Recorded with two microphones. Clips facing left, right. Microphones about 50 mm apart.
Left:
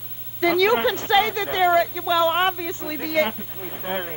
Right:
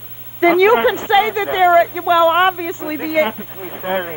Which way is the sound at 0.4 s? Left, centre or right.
Right.